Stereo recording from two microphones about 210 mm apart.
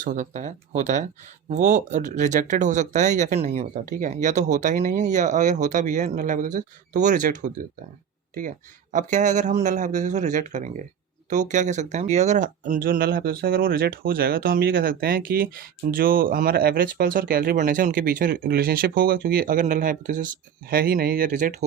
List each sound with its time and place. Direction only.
0.0 s speech: 40° right (ahead or behind)